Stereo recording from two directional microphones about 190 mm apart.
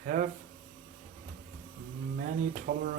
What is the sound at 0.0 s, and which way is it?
Speech, 45° right (ahead or behind).